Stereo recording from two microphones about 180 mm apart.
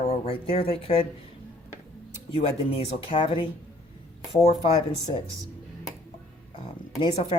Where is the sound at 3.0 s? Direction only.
30° left (ahead or behind).